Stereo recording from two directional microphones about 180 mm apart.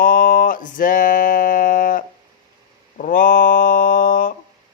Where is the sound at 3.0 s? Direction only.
50° left (ahead or behind).